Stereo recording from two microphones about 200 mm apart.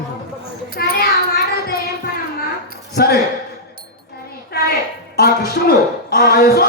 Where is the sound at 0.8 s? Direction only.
50° left (ahead or behind).